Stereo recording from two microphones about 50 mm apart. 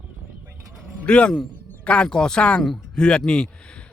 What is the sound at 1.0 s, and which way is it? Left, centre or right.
Speech, left.